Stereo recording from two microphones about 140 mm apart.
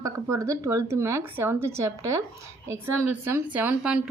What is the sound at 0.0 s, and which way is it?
A woman's voice, 20° right (ahead or behind).